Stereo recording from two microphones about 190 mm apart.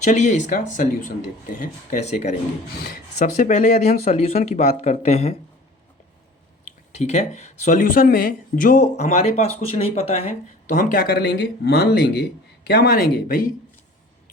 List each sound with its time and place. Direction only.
0.0 s speech: 40° left (ahead or behind)
6.9 s speech: 35° left (ahead or behind)
10.7 s speech: 45° left (ahead or behind)